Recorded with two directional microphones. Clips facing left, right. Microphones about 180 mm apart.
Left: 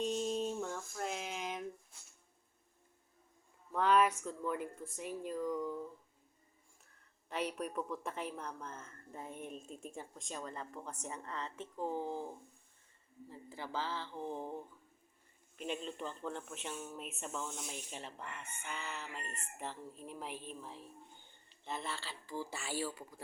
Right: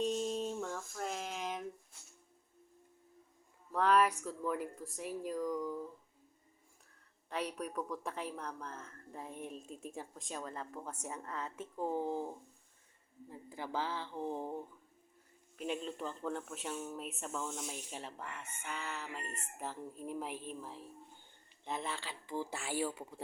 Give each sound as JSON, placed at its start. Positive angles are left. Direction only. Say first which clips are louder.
{"t": 0.0, "sound": "a sound", "louder": "even", "side_deg": 0}
{"t": 3.7, "sound": "a sound", "louder": "even", "side_deg": 0}
{"t": 4.2, "sound": "speech", "louder": "right 1 dB", "side_deg": 0}
{"t": 7.3, "sound": "speech", "louder": "left 1 dB", "side_deg": 0}
{"t": 13.3, "sound": "speech", "louder": "right 2 dB", "side_deg": -10}
{"t": 15.5, "sound": "speech", "louder": "right 2 dB", "side_deg": -5}
{"t": 21.6, "sound": "speech", "louder": "right 2 dB", "side_deg": -15}